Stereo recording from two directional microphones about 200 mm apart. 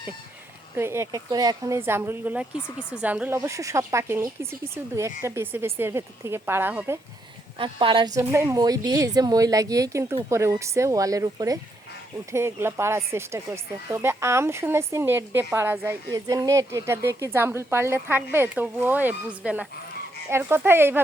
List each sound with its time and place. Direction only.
0.8 s speech: 15° right (ahead or behind)
7.6 s speech: 25° right (ahead or behind)